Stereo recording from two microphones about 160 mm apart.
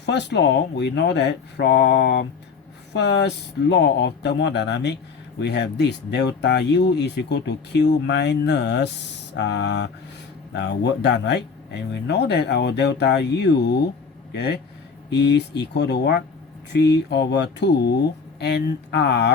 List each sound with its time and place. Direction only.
0.0 s speech: 90° left